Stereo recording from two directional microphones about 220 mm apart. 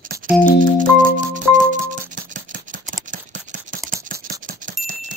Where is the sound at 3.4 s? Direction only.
35° right (ahead or behind).